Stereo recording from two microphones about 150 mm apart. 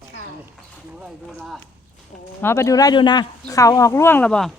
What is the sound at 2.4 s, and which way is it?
Speech, 15° left (ahead or behind).